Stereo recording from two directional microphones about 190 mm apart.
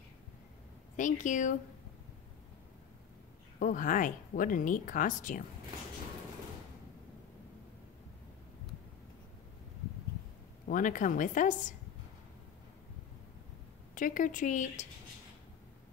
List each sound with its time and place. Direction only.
0.9 s speech: 40° left (ahead or behind)
3.5 s speech: 45° left (ahead or behind)
10.7 s speech: 45° left (ahead or behind)
13.9 s speech: 45° left (ahead or behind)